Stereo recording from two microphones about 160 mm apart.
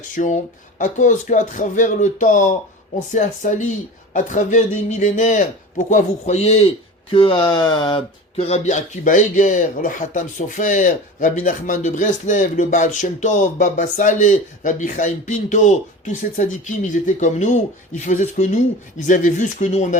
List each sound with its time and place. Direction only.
0.2 s speech: 55° left (ahead or behind)